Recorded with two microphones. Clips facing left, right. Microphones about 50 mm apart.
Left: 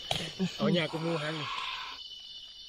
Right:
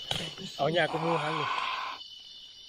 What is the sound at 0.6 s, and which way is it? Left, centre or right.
Speech, right.